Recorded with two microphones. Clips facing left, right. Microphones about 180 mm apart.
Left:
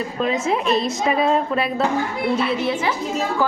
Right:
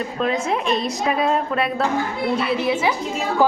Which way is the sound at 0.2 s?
Centre (ahead or behind).